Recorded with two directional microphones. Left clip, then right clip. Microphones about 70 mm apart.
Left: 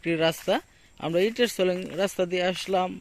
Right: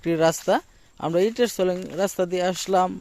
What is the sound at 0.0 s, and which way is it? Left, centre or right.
Speech, right.